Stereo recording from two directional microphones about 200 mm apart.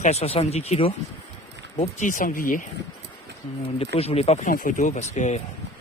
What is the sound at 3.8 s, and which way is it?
Speech, 30° left (ahead or behind).